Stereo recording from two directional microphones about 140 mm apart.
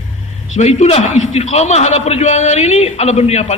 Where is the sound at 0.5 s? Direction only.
50° left (ahead or behind).